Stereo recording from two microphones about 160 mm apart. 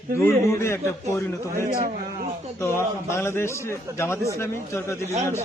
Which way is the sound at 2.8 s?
15° left (ahead or behind).